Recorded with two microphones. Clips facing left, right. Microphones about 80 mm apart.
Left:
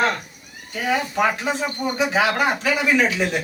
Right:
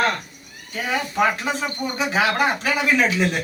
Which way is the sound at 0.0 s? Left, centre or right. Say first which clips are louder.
Even; centre.